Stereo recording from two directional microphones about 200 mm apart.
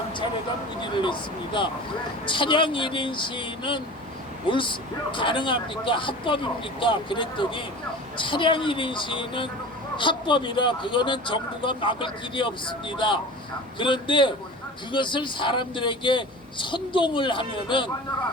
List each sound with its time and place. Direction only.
2.2 s speech: 25° left (ahead or behind)